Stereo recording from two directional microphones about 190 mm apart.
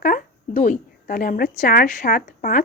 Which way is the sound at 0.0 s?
45° left (ahead or behind).